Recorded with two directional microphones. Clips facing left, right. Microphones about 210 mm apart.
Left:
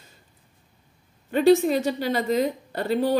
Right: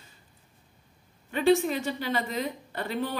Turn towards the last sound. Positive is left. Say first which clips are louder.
# left 9 dB
turn(degrees=35)  # may be behind; listen again after turning